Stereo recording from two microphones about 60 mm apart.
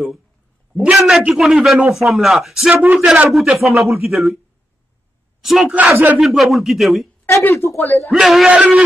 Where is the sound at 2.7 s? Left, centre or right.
Right.